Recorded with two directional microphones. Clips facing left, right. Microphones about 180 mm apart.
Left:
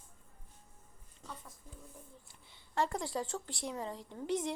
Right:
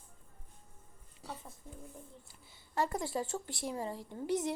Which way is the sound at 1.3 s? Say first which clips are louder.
Right 3 dB; 25° right (ahead or behind).